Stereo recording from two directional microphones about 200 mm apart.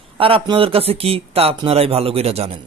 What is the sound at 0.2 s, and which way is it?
Speech, 25° right (ahead or behind).